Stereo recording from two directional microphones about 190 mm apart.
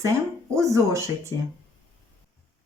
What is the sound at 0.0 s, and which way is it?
Speech, 15° right (ahead or behind).